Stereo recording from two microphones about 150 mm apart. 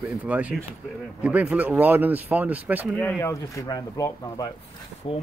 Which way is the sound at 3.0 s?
15° left (ahead or behind).